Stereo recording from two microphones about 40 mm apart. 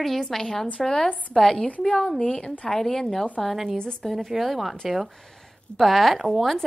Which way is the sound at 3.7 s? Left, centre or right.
Centre.